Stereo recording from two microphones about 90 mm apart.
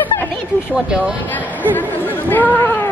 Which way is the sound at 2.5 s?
25° left (ahead or behind).